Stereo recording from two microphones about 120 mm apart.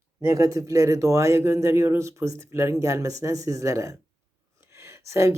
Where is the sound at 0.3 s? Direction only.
25° right (ahead or behind).